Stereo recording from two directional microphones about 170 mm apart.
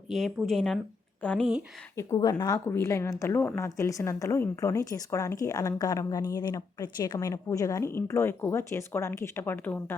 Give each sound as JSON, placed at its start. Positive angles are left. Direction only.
{"t": 0.1, "sound": "speech", "side_deg": 0}
{"t": 2.0, "sound": "speech", "side_deg": 20}